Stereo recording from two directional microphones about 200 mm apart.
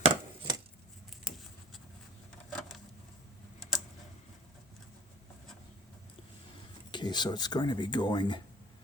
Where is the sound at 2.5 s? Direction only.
Centre (ahead or behind).